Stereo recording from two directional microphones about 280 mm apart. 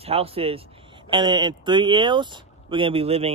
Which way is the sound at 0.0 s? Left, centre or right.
Right.